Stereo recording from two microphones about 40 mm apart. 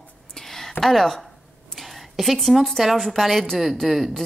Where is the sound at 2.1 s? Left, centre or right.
Centre.